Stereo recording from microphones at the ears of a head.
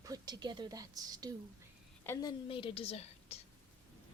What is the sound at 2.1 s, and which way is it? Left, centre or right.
A woman's voice, left.